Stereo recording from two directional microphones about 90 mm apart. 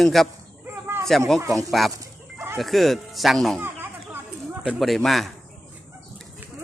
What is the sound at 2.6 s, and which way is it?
A man's voice, centre (ahead or behind).